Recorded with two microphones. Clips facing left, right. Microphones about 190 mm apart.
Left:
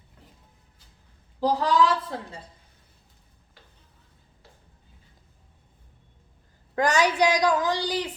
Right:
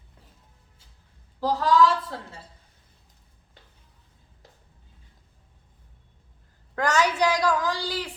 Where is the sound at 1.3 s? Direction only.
15° left (ahead or behind).